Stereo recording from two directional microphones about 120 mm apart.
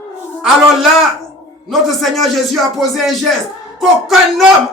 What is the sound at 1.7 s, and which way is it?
Speech, centre (ahead or behind).